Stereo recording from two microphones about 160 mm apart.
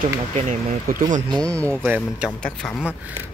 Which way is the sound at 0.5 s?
55° right (ahead or behind).